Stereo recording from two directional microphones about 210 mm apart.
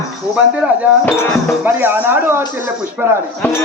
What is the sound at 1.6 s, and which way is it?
Speech, 10° right (ahead or behind).